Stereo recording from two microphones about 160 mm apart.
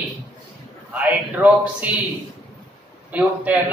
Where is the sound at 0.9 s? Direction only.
10° right (ahead or behind).